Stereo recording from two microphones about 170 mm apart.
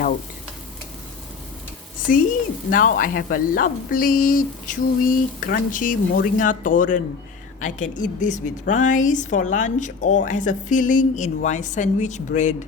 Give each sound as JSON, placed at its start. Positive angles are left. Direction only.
{"t": 2.1, "sound": "speech", "side_deg": 55}